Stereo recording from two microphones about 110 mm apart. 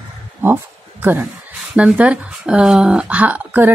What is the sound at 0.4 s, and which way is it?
Speech, 20° right (ahead or behind).